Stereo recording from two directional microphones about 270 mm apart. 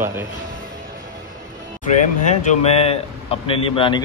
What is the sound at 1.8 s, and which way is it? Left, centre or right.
Speech, left.